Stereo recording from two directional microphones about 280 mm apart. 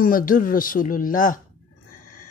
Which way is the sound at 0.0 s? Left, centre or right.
Left.